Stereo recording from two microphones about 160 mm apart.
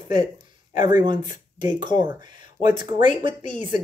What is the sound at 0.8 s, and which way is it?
Speech, 25° right (ahead or behind).